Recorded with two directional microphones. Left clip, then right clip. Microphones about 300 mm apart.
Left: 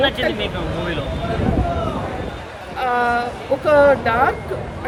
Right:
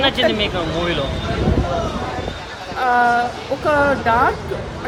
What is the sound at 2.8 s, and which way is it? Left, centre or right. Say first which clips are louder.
Speech: right 3 dB; centre.